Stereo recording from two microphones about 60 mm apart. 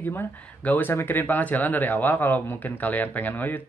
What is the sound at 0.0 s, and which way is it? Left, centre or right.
Speech, left.